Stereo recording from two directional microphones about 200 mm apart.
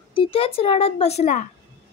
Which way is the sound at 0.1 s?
25° left (ahead or behind).